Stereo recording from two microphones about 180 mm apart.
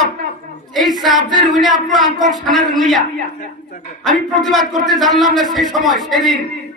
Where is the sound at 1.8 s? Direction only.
Centre (ahead or behind).